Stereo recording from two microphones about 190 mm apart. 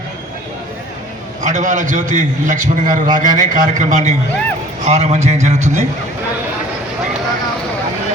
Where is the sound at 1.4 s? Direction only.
40° right (ahead or behind).